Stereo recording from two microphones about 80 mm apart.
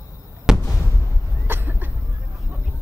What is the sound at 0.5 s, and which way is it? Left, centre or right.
Fireworks, centre.